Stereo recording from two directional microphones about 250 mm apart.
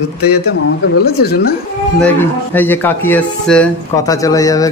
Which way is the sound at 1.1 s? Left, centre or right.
Left.